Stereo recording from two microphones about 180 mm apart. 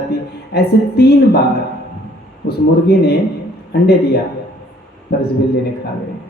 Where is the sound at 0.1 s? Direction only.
60° left (ahead or behind).